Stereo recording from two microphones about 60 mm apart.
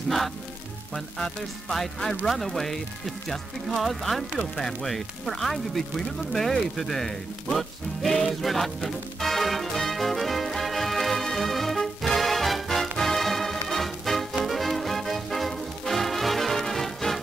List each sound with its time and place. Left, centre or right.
0.9 s speech: centre
4.6 s music: centre